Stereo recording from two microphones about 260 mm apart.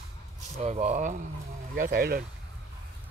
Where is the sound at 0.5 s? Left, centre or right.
Right.